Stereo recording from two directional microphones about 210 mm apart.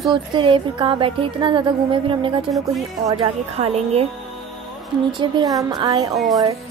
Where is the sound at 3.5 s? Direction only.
30° right (ahead or behind).